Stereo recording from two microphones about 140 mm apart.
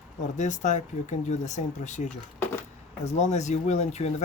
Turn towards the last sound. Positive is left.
turn(degrees=55)  # may be behind; listen again after turning